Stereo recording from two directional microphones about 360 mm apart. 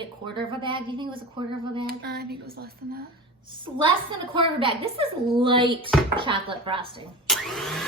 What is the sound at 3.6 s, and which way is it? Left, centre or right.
A woman's voice, centre.